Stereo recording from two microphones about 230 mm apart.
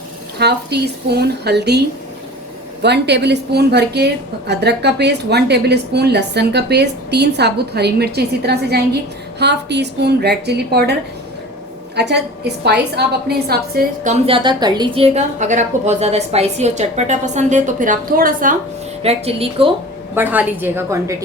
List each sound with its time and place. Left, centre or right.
0.3 s a woman's voice: right
2.8 s a woman's voice: right
11.9 s a woman's voice: right
13.2 s a woman's voice: right
19.0 s speech: right
20.1 s a woman's voice: centre